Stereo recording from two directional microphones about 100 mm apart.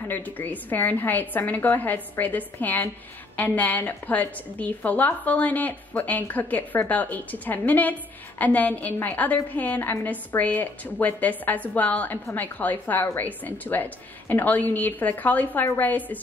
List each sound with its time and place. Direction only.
0.1 s a woman's voice: 15° left (ahead or behind)